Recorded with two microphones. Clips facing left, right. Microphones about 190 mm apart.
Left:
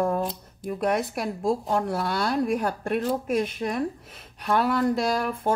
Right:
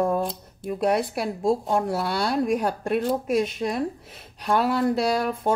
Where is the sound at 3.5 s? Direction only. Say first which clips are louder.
Right 1 dB; 35° right (ahead or behind).